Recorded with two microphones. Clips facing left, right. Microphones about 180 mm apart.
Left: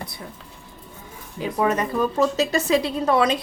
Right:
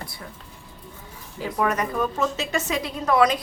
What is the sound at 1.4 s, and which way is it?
A woman's voice, 20° left (ahead or behind).